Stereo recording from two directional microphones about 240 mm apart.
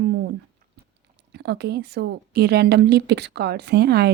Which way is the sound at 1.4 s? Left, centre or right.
Right.